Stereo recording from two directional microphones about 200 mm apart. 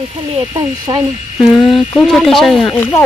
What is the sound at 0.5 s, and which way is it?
Speech, 20° right (ahead or behind).